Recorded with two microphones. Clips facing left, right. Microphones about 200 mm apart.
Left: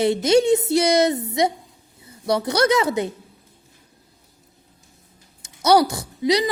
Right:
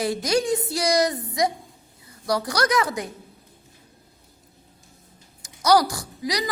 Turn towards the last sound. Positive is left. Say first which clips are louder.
# left 8 dB
turn(degrees=25)  # may be behind; listen again after turning